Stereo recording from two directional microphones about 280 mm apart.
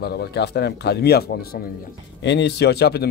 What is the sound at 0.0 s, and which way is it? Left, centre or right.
Speech, left.